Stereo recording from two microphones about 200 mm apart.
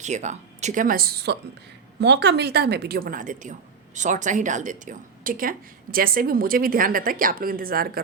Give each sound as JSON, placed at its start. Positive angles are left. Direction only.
{"t": 0.0, "sound": "a woman's voice", "side_deg": -35}